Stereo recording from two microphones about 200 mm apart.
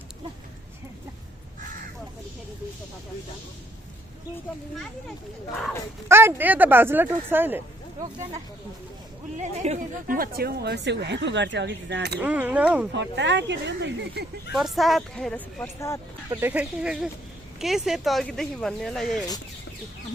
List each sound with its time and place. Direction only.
4.7 s speech: centre (ahead or behind)
6.1 s speech: 10° right (ahead or behind)
9.4 s speech: 40° right (ahead or behind); by 12.2 s 55° right (ahead or behind)
12.2 s speech: 10° right (ahead or behind)
12.9 s speech: 60° right (ahead or behind)
14.5 s speech: centre (ahead or behind)
16.3 s speech: 10° right (ahead or behind)